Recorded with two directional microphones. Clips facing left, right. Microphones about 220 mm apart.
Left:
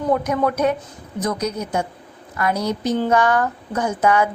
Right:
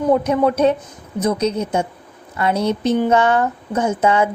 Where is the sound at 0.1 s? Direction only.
25° right (ahead or behind).